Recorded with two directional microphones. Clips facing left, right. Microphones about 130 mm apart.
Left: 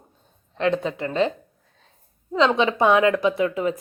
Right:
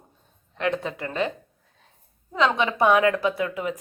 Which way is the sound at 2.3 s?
25° left (ahead or behind).